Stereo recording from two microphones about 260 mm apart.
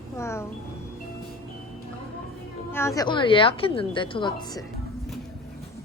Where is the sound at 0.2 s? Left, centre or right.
Centre.